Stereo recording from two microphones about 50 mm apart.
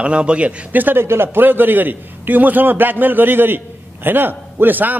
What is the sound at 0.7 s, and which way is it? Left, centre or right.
Speech, right.